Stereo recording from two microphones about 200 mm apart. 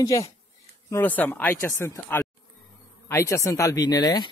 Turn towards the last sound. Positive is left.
turn(degrees=20)  # may be behind; listen again after turning